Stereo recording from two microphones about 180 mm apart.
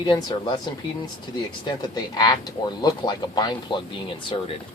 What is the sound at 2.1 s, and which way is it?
Speech, 20° left (ahead or behind).